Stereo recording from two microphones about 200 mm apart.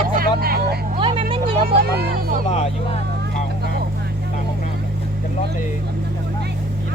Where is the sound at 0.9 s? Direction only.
25° right (ahead or behind).